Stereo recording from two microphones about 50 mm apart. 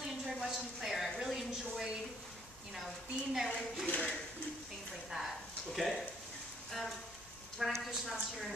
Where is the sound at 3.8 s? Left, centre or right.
Left.